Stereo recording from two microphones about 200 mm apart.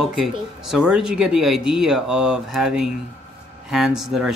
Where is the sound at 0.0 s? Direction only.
Centre (ahead or behind).